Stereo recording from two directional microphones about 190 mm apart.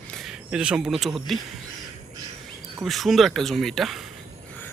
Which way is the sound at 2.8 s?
Centre (ahead or behind).